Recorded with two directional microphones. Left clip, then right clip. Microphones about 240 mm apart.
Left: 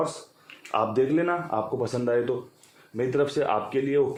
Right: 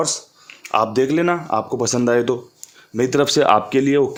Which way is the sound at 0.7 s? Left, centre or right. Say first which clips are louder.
Right 6 dB; right.